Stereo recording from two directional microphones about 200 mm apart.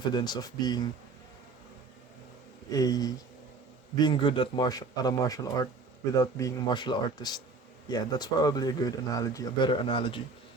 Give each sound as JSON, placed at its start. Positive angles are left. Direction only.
{"t": 0.0, "sound": "speech", "side_deg": 20}
{"t": 2.6, "sound": "speech", "side_deg": 20}